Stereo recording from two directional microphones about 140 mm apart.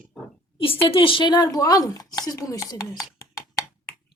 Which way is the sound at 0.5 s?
40° left (ahead or behind).